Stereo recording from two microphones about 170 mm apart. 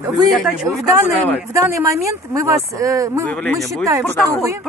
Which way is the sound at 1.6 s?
15° right (ahead or behind).